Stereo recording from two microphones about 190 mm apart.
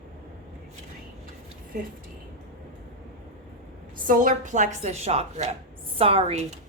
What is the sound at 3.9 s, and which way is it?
A woman's voice, 45° right (ahead or behind).